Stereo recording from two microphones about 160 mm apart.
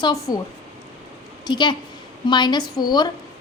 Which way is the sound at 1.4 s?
30° left (ahead or behind).